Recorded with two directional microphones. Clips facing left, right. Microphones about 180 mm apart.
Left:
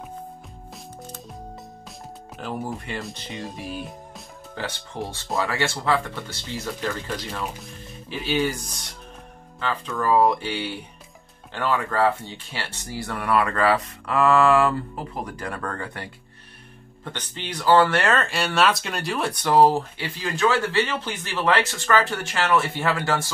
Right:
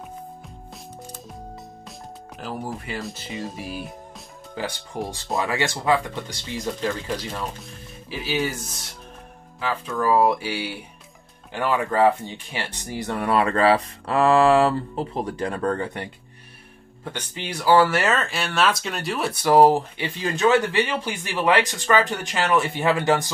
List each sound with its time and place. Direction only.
1.9 s speech: centre (ahead or behind)
4.6 s speech: 15° right (ahead or behind)
17.0 s speech: 10° right (ahead or behind)